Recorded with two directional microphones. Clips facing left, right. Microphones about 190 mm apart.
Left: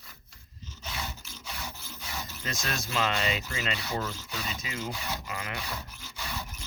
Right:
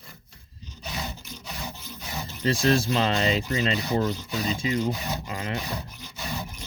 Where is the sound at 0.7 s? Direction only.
15° right (ahead or behind).